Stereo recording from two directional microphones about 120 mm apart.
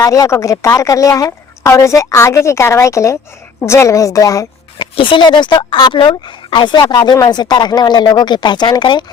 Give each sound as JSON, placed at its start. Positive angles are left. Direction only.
{"t": 0.0, "sound": "speech", "side_deg": 30}
{"t": 4.8, "sound": "speech", "side_deg": 45}